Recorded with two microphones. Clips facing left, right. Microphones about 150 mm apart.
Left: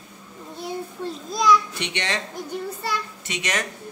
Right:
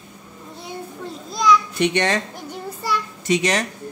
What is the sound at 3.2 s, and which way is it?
Speech, 35° right (ahead or behind).